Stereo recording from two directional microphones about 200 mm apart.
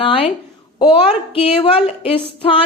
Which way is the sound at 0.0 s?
25° left (ahead or behind).